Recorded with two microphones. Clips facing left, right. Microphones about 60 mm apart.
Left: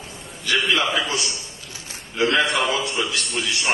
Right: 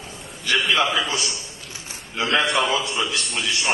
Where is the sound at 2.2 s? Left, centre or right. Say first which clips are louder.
Left 2 dB; right.